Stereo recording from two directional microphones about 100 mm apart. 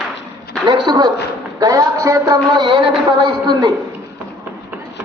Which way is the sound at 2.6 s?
55° right (ahead or behind).